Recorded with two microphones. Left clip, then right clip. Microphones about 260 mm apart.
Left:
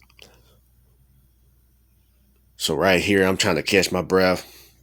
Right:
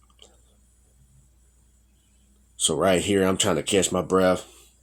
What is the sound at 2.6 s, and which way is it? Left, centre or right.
Speech, left.